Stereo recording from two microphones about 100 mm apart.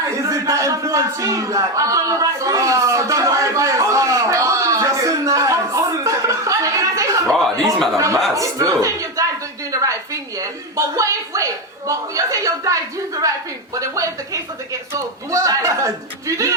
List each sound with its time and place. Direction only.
0.2 s a woman's voice: 35° right (ahead or behind)